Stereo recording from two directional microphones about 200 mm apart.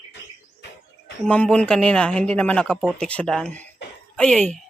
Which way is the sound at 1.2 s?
5° left (ahead or behind).